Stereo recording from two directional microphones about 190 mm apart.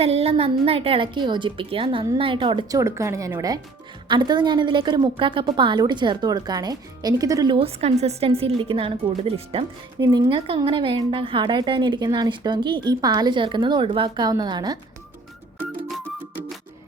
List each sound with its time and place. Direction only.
0.0 s a woman's voice: 30° right (ahead or behind)